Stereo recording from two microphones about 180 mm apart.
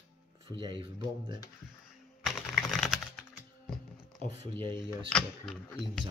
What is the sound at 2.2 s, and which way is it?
Typing, centre (ahead or behind).